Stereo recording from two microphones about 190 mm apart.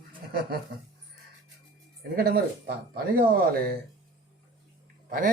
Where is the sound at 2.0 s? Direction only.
55° right (ahead or behind).